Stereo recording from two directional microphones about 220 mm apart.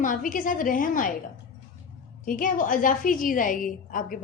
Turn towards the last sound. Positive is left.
turn(degrees=40)  # may be behind; listen again after turning